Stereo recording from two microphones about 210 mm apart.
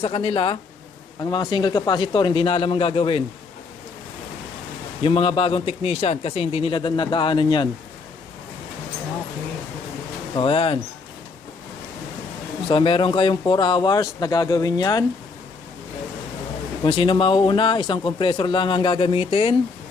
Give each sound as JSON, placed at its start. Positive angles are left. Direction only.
{"t": 0.0, "sound": "speech", "side_deg": 25}
{"t": 5.0, "sound": "speech", "side_deg": 25}
{"t": 10.3, "sound": "speech", "side_deg": 25}
{"t": 12.6, "sound": "speech", "side_deg": 25}
{"t": 16.8, "sound": "speech", "side_deg": 25}